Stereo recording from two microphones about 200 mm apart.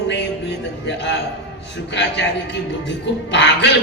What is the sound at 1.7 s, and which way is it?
Speech, 60° left (ahead or behind).